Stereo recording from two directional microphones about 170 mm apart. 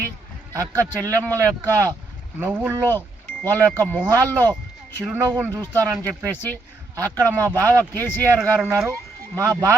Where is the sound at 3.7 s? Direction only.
10° left (ahead or behind).